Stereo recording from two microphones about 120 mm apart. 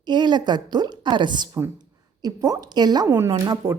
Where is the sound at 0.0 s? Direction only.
40° right (ahead or behind).